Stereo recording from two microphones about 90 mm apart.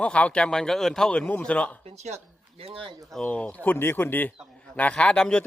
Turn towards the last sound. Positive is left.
turn(degrees=10)  # may be behind; listen again after turning